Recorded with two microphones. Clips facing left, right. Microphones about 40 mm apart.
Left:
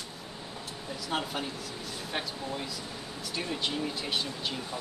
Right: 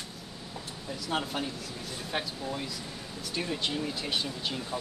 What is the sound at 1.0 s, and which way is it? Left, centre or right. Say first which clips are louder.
Speech: right 1 dB; centre.